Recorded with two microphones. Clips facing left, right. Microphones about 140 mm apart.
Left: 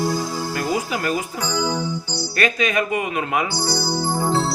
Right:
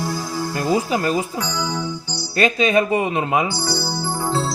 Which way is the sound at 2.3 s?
25° right (ahead or behind).